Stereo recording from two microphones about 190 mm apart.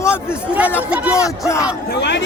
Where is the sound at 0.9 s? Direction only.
5° right (ahead or behind).